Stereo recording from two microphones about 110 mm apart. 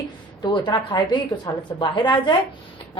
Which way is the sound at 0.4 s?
45° left (ahead or behind).